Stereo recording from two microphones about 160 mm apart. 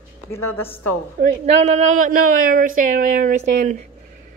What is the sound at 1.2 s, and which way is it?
Speech, 45° right (ahead or behind).